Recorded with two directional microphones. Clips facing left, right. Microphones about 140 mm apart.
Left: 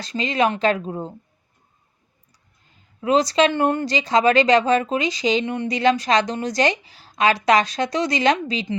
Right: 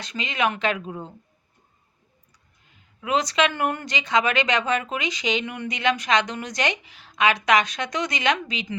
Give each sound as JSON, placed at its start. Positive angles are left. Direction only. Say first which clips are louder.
{"t": 0.0, "sound": "speech", "louder": "left 5 dB", "side_deg": 35}
{"t": 3.0, "sound": "speech", "louder": "left 5 dB", "side_deg": 35}